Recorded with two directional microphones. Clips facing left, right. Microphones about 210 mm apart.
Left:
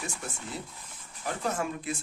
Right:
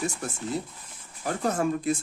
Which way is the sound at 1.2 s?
40° right (ahead or behind).